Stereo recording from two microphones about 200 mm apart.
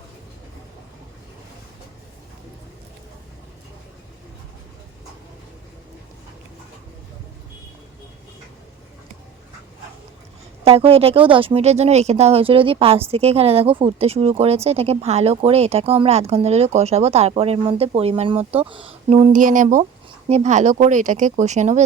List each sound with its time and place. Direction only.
10.6 s speech: 30° right (ahead or behind)